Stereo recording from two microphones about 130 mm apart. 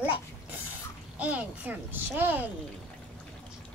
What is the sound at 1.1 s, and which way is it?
Speech, 10° right (ahead or behind).